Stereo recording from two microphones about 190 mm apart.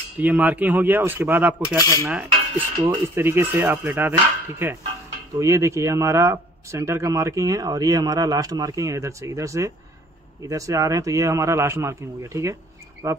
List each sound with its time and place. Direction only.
0.2 s speech: 10° right (ahead or behind)
1.8 s cutlery: 15° left (ahead or behind)
2.0 s cutlery: 5° right (ahead or behind)
2.9 s speech: 15° right (ahead or behind)